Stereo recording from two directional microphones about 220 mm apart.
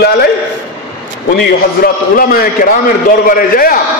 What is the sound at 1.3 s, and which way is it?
A man's voice, 45° left (ahead or behind).